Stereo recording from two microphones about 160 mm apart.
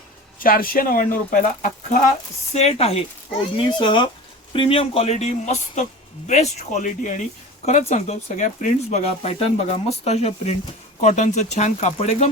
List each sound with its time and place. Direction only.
0.3 s speech: 60° left (ahead or behind)
2.6 s speech: 40° left (ahead or behind)